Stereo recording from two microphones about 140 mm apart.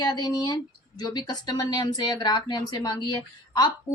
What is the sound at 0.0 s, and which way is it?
Speech, 30° left (ahead or behind).